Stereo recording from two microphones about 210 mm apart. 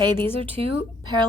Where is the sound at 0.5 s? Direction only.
25° right (ahead or behind).